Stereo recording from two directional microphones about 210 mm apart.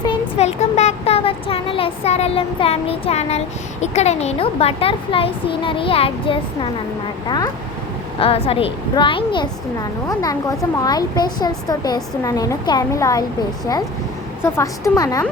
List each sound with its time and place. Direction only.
0.0 s a woman's voice: 25° left (ahead or behind)
14.4 s speech: 10° left (ahead or behind)